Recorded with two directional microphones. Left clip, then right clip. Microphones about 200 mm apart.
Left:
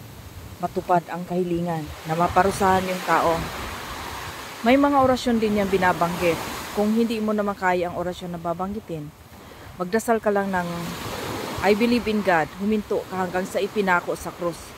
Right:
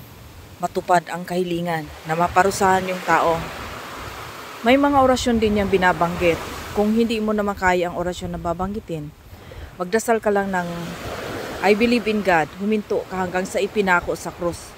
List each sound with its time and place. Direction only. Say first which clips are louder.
0.6 s speech: right 3 dB; 30° right (ahead or behind)
4.6 s speech: right 2 dB; 15° right (ahead or behind)